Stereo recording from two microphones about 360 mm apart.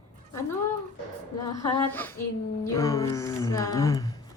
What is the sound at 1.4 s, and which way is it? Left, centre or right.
A woman's voice, centre.